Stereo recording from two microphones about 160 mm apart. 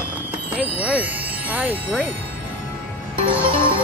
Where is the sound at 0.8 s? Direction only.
10° right (ahead or behind).